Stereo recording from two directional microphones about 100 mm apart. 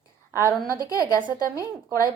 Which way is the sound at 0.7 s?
35° left (ahead or behind).